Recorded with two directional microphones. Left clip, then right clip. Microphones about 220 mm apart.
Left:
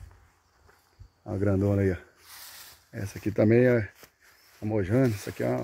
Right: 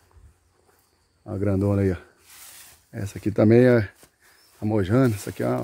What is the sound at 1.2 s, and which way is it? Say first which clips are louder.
Speech: right 2 dB; centre (ahead or behind).